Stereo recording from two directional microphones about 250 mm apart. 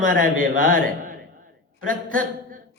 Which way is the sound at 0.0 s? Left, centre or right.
Right.